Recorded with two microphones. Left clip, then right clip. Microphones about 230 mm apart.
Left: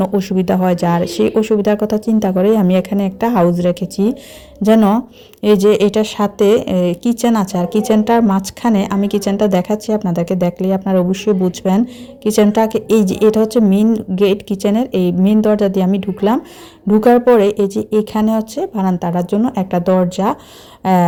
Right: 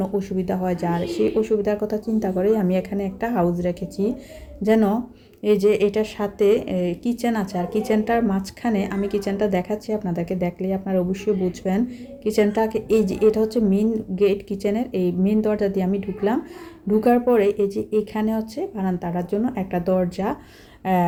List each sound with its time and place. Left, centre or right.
0.0 s a woman's voice: left